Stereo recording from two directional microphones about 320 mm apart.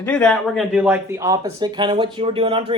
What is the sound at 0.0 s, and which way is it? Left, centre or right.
Speech, centre.